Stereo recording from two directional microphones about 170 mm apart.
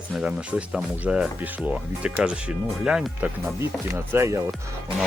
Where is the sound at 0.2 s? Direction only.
5° right (ahead or behind).